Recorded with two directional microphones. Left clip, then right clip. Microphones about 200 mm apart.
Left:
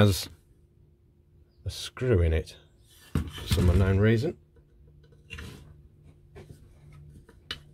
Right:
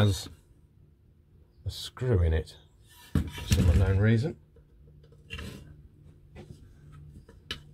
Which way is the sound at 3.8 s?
45° left (ahead or behind).